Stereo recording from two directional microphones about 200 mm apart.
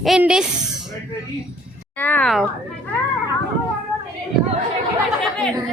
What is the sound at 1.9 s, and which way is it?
Speech, 10° left (ahead or behind).